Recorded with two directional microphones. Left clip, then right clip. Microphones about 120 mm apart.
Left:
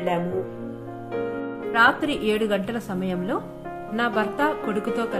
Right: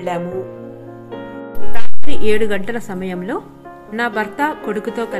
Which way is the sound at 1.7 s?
30° right (ahead or behind).